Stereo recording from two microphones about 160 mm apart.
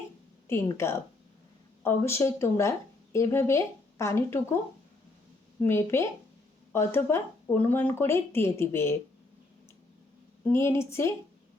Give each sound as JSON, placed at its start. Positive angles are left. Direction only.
{"t": 0.4, "sound": "a woman's voice", "side_deg": 15}
{"t": 5.6, "sound": "a woman's voice", "side_deg": 15}
{"t": 10.4, "sound": "a woman's voice", "side_deg": 15}